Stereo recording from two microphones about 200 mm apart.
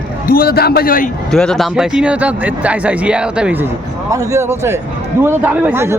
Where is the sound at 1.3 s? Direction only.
Centre (ahead or behind).